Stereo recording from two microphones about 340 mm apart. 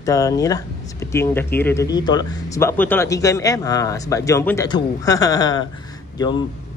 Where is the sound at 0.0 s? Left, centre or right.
Centre.